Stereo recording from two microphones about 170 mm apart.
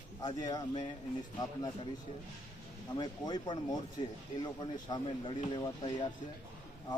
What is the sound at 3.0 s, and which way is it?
A man's voice, 25° left (ahead or behind).